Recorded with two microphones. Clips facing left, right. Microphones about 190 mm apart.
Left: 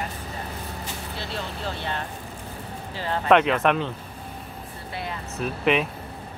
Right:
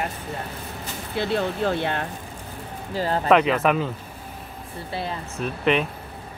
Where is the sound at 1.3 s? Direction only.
55° right (ahead or behind).